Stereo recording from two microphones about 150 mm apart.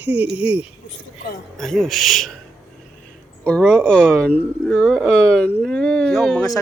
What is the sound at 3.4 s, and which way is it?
Speech, 5° left (ahead or behind).